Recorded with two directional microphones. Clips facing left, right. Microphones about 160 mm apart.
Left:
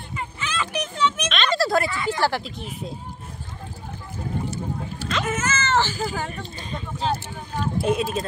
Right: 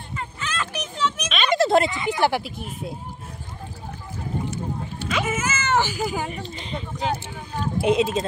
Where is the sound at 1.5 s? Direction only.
20° right (ahead or behind).